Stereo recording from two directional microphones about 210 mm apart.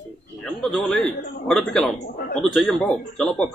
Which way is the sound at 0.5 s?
Centre (ahead or behind).